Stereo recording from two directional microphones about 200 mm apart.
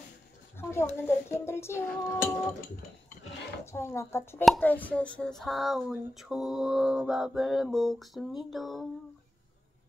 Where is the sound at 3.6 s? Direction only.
15° left (ahead or behind).